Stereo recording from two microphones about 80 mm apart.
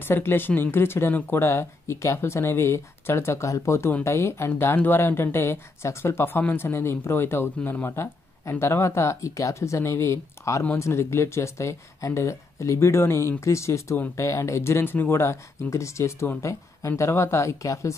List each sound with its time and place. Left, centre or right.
0.0 s speech: left